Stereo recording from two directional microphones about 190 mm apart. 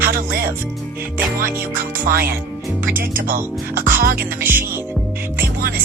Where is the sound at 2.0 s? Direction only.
50° right (ahead or behind).